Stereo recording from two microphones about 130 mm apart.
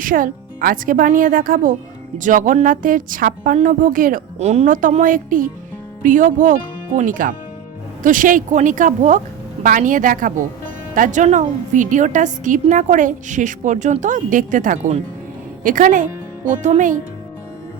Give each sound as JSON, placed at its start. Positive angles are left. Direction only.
{"t": 0.0, "sound": "a woman's voice", "side_deg": -90}
{"t": 9.6, "sound": "a woman's voice", "side_deg": -90}
{"t": 16.5, "sound": "a woman's voice", "side_deg": -75}